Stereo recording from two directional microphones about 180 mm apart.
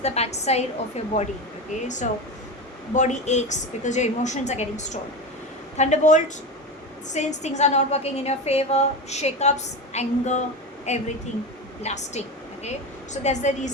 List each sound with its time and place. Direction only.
0.0 s a woman's voice: 35° left (ahead or behind)
2.9 s a woman's voice: 40° left (ahead or behind)
13.2 s a woman's voice: 40° left (ahead or behind)